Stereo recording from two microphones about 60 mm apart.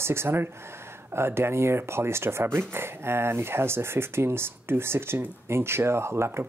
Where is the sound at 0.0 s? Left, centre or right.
Right.